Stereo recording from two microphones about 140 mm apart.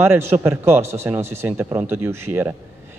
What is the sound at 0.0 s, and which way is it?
A man's voice, 15° right (ahead or behind).